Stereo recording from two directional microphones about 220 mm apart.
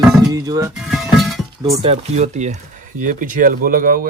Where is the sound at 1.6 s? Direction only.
20° right (ahead or behind).